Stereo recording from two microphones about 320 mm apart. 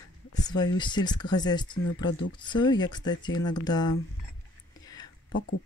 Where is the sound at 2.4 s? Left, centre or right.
Centre.